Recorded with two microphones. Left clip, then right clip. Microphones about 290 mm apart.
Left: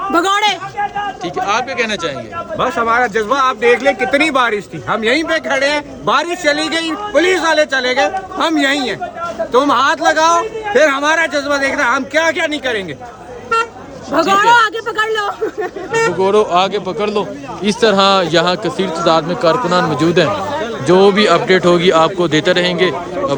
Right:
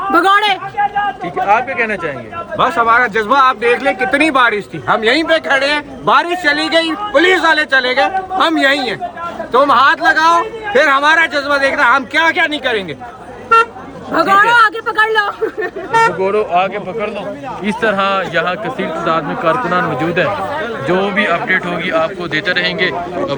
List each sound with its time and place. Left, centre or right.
0.1 s a man's voice: centre
1.8 s a man's voice: centre
14.1 s a man's voice: centre
15.9 s speech: centre
17.6 s a man's voice: centre